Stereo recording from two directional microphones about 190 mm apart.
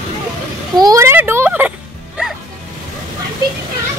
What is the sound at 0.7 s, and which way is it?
Music, 20° right (ahead or behind).